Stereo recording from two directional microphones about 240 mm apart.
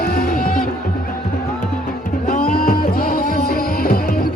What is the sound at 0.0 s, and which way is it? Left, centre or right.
Music, left.